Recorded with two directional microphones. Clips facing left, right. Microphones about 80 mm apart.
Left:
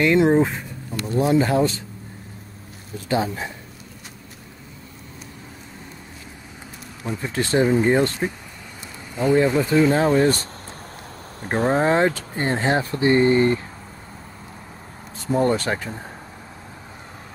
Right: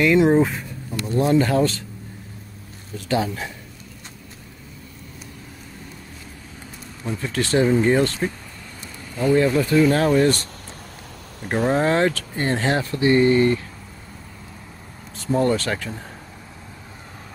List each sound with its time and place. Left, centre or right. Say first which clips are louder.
0.0 s speech: right 1 dB; centre
3.1 s speech: even; left
7.0 s speech: even; centre
7.2 s speech: even; left
15.2 s speech: even; left